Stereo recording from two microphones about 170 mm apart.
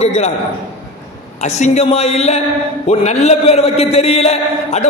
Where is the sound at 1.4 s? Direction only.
40° left (ahead or behind).